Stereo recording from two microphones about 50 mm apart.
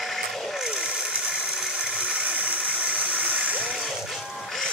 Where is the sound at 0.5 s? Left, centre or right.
Centre.